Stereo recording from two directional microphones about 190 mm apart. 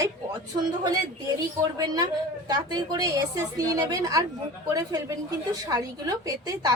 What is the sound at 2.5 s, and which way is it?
A woman's voice, 20° right (ahead or behind).